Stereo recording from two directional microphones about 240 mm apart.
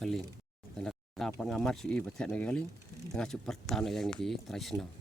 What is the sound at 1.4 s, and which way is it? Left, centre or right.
Speech, centre.